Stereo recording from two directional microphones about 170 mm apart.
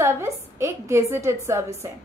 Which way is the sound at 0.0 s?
15° right (ahead or behind).